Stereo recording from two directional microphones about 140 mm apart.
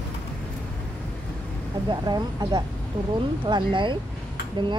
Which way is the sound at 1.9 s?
30° right (ahead or behind).